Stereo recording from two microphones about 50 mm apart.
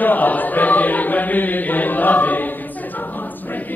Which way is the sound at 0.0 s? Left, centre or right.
Left.